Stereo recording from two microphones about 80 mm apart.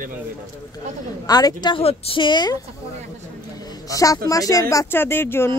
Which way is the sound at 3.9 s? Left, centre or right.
Left.